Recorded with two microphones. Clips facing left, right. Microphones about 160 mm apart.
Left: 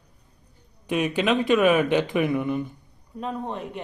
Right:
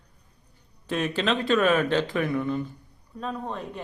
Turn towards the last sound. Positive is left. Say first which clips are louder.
# left 2 dB
turn(degrees=20)  # may be behind; listen again after turning